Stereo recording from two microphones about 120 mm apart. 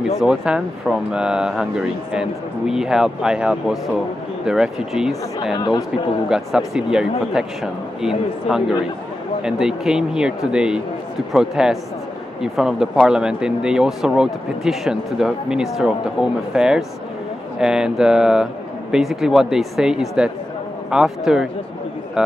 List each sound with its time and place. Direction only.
0.0 s speech: 5° right (ahead or behind)
5.6 s speech: 40° left (ahead or behind)
6.2 s speech: 5° right (ahead or behind)